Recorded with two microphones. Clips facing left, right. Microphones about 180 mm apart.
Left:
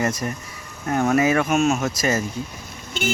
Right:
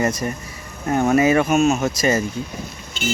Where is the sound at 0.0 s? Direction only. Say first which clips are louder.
Right 2 dB; centre (ahead or behind).